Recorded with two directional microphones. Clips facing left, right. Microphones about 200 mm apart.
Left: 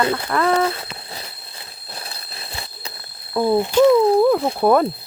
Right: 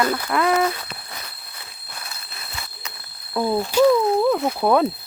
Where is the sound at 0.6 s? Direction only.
30° left (ahead or behind).